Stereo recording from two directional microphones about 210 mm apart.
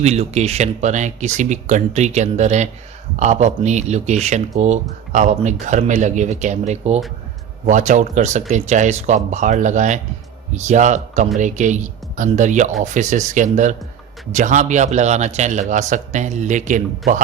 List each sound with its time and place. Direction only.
0.0 s speech: 30° right (ahead or behind)